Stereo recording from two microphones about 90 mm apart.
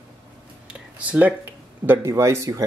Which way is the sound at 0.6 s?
15° right (ahead or behind).